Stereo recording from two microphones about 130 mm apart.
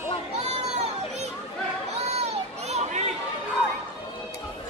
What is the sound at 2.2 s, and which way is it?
Children playing, 55° right (ahead or behind).